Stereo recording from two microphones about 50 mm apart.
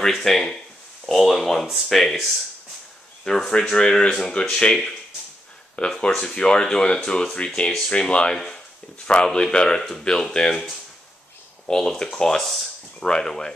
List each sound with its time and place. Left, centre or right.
0.0 s speech: centre
3.3 s speech: centre